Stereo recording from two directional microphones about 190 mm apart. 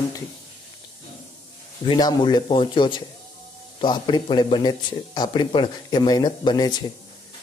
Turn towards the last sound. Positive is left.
turn(degrees=20)  # may be behind; listen again after turning